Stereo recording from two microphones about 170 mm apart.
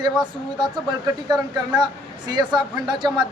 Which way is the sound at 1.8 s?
25° right (ahead or behind).